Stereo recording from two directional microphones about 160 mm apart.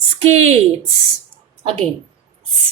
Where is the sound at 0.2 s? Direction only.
40° right (ahead or behind).